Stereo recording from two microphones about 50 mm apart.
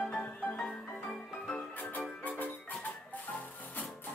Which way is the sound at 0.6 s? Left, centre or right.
Centre.